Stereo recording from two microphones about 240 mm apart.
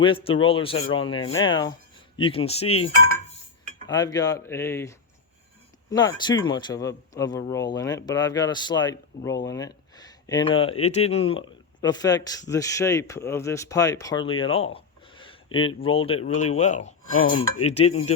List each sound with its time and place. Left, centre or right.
0.0 s speech: left
17.1 s cutlery: left
17.6 s speech: left